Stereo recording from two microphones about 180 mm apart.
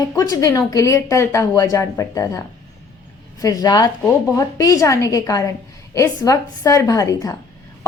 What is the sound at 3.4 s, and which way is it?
A woman's voice, 20° left (ahead or behind).